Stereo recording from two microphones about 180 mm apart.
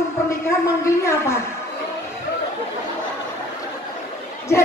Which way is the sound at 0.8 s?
15° left (ahead or behind).